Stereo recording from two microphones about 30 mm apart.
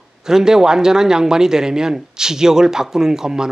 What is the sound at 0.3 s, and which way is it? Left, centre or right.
Speech, centre.